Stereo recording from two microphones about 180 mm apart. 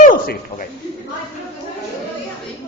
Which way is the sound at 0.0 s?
50° left (ahead or behind).